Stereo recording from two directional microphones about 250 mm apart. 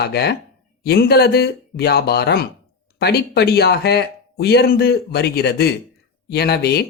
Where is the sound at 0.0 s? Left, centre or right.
Left.